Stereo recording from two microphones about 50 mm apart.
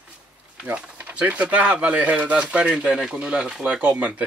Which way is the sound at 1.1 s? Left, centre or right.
Right.